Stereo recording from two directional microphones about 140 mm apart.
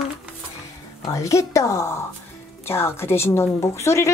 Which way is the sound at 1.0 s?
25° left (ahead or behind).